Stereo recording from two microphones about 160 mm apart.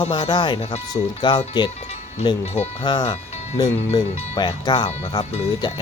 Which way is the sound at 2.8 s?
30° left (ahead or behind).